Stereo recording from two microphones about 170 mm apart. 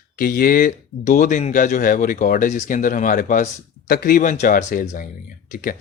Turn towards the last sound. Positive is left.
turn(degrees=50)  # may be behind; listen again after turning